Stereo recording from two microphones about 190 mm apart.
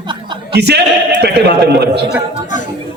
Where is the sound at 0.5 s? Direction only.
60° right (ahead or behind).